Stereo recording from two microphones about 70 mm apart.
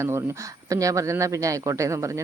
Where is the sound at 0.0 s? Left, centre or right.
Right.